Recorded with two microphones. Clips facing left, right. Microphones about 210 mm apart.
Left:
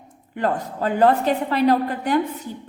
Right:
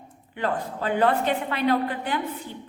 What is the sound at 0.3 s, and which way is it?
A woman's voice, 45° left (ahead or behind).